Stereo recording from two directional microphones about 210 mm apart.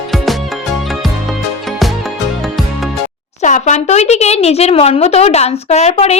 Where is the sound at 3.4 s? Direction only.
35° left (ahead or behind).